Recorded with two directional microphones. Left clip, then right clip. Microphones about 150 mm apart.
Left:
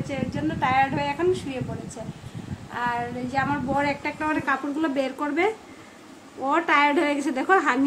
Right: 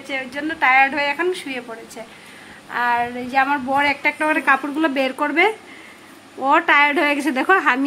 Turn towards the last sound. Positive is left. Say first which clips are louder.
# right 4 dB
turn(degrees=-45)  # may be behind; listen again after turning